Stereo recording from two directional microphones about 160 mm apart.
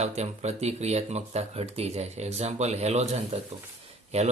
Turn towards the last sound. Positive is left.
turn(degrees=-40)  # may be behind; listen again after turning